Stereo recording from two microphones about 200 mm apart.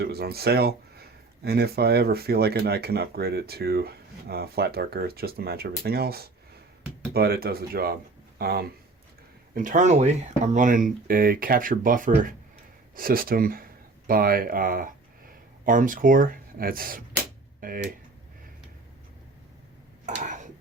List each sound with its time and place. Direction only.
0.0 s speech: 50° right (ahead or behind)
9.6 s speech: 40° right (ahead or behind)
20.1 s a sound: 40° right (ahead or behind)